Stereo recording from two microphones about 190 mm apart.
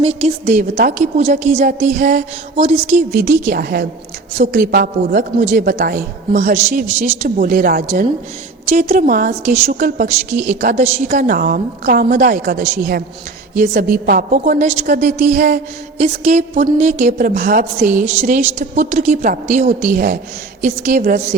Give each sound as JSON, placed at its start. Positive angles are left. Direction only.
{"t": 0.0, "sound": "a woman's voice", "side_deg": -35}
{"t": 2.6, "sound": "a woman's voice", "side_deg": -35}
{"t": 3.1, "sound": "a woman's voice", "side_deg": -50}
{"t": 6.3, "sound": "a woman's voice", "side_deg": -35}
{"t": 14.0, "sound": "a woman's voice", "side_deg": -50}
{"t": 16.0, "sound": "a woman's voice", "side_deg": -35}